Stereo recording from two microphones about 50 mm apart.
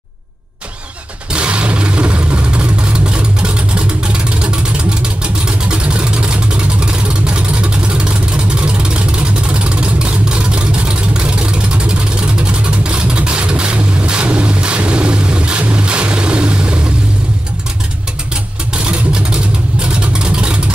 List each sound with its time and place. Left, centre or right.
1.3 s vehicle: right
18.9 s vehicle: right